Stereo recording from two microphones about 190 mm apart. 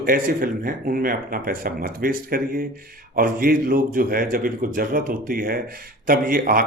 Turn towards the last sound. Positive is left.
turn(degrees=-45)  # may be behind; listen again after turning